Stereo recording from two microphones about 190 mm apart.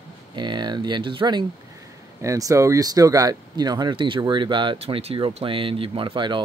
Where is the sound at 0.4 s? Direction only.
25° right (ahead or behind).